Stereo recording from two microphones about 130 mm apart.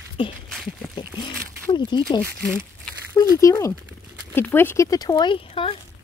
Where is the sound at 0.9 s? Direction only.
35° left (ahead or behind).